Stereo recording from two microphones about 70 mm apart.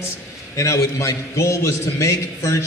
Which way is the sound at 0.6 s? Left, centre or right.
Left.